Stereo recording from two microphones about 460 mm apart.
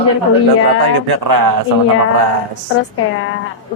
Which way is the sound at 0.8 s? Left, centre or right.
Right.